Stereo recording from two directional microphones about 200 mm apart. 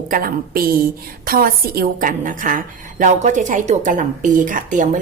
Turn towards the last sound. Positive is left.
turn(degrees=-40)  # may be behind; listen again after turning